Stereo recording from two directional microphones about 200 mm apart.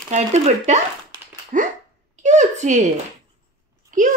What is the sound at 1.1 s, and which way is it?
Dog, 40° right (ahead or behind).